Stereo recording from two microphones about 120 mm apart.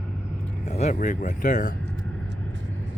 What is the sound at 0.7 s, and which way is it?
Speech, 80° left.